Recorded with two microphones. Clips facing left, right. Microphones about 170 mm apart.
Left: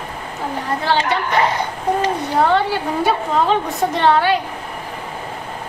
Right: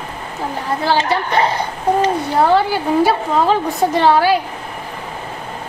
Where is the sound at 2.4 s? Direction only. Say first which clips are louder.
Right 3 dB; 5° right (ahead or behind).